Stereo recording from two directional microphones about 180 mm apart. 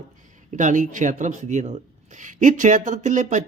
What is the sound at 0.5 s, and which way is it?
Speech, 45° right (ahead or behind).